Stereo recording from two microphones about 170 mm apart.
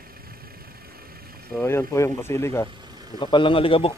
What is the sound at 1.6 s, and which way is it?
Speech, 15° left (ahead or behind).